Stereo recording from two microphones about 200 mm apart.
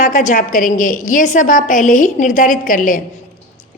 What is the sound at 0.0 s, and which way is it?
A woman's voice, 40° left (ahead or behind).